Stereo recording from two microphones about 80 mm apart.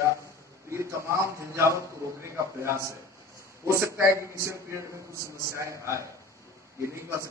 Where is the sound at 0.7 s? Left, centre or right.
Right.